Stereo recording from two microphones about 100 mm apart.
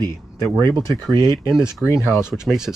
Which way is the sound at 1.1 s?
45° right (ahead or behind).